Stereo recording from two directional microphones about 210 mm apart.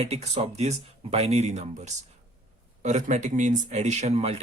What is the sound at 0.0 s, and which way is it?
Speech, 30° right (ahead or behind).